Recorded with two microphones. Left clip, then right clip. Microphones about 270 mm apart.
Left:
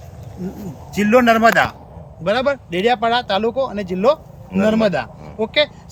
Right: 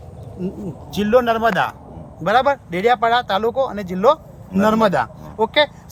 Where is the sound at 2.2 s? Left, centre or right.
Centre.